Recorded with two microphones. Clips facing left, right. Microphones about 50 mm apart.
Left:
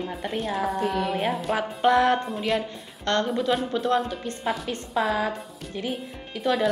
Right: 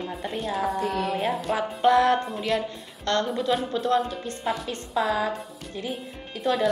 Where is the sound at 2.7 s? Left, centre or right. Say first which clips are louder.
Even; left.